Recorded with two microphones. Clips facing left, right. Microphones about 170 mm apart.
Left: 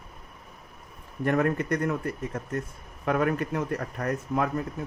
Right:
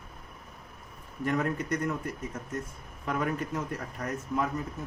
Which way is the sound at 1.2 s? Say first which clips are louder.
Left 5 dB; 65° left (ahead or behind).